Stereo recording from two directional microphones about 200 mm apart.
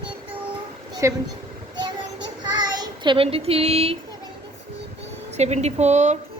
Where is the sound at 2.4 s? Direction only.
20° right (ahead or behind).